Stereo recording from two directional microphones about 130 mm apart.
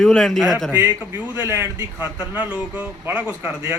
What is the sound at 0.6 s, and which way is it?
A man's voice, 15° right (ahead or behind).